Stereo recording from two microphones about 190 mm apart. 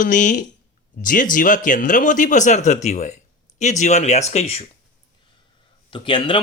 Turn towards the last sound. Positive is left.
turn(degrees=25)  # may be behind; listen again after turning